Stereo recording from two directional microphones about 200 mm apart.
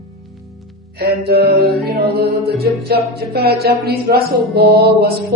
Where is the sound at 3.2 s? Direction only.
50° right (ahead or behind).